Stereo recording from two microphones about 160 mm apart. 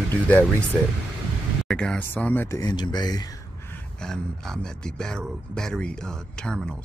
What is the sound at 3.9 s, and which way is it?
Speech, 5° left (ahead or behind).